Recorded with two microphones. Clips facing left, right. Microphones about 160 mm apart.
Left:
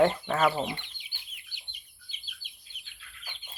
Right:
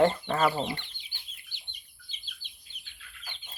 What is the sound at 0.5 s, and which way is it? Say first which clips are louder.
Speech: even; 15° left (ahead or behind).